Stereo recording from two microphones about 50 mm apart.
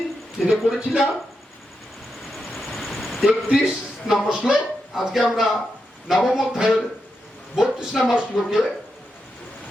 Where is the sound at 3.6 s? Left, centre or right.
Centre.